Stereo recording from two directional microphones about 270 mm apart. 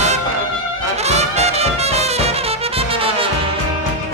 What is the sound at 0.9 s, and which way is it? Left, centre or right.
Music, right.